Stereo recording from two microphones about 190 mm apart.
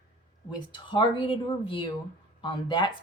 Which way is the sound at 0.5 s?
25° left (ahead or behind).